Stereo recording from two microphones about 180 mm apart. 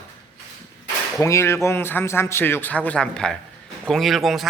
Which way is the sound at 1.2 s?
15° left (ahead or behind).